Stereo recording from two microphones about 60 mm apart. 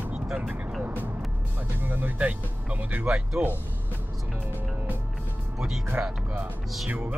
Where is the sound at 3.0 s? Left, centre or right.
Centre.